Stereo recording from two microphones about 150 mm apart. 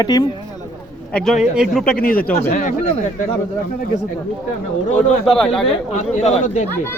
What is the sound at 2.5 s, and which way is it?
Speech, 55° left (ahead or behind).